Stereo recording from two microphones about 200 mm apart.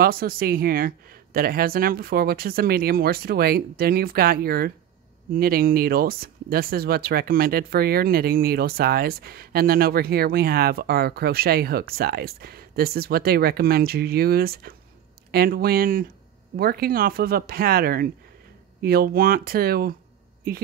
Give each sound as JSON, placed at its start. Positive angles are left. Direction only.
{"t": 0.0, "sound": "speech", "side_deg": -50}